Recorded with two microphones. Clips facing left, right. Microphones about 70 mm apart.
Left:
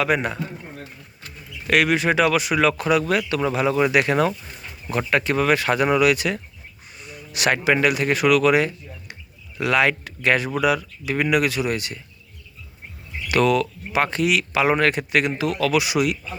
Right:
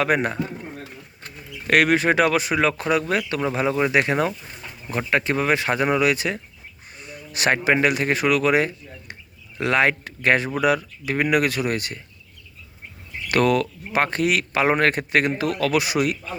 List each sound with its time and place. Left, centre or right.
0.0 s speech: right
13.2 s speech: right